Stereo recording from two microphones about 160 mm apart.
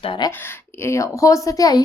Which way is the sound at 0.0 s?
35° left (ahead or behind).